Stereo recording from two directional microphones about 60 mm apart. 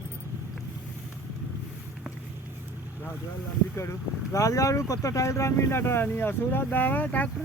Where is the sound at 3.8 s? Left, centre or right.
Left.